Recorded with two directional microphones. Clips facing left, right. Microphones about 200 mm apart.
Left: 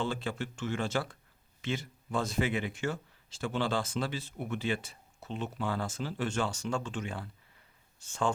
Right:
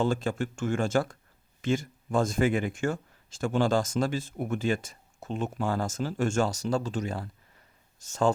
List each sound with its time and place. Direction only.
0.0 s speech: 45° right (ahead or behind)